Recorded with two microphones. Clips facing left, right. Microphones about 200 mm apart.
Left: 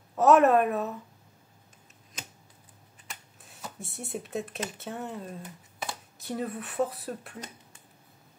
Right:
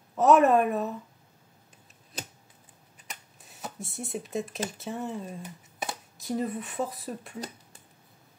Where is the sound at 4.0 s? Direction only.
Centre (ahead or behind).